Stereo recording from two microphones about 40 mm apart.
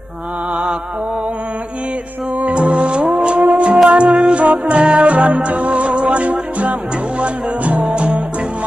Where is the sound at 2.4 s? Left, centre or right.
Right.